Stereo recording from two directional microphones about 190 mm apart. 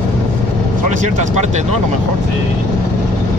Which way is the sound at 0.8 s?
40° right (ahead or behind).